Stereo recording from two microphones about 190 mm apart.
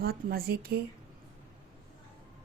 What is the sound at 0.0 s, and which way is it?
Speech, 50° right (ahead or behind).